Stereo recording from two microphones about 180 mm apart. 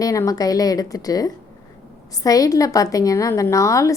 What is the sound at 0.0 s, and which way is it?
A woman's voice, 20° left (ahead or behind).